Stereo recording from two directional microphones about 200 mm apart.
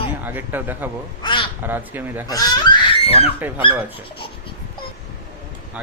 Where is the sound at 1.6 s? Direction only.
10° right (ahead or behind).